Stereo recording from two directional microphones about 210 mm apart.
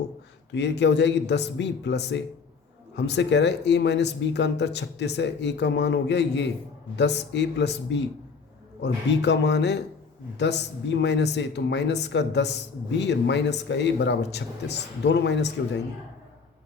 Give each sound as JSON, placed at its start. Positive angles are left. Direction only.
{"t": 0.5, "sound": "a man's voice", "side_deg": 55}